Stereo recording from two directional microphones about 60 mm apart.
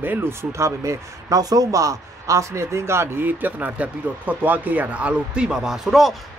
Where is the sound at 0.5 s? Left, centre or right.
Right; by 5.4 s centre.